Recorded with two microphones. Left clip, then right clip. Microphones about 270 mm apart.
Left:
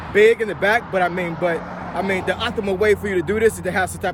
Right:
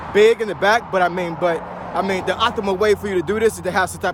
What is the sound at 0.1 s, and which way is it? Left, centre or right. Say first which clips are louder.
Speech: even; centre.